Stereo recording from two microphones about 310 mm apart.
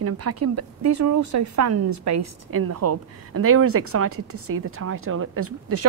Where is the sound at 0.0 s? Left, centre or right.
Right.